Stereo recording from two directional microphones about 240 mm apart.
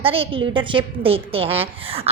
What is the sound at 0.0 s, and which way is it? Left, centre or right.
A woman's voice, right.